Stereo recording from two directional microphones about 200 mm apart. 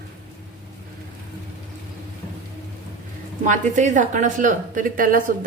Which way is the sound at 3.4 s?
40° right (ahead or behind).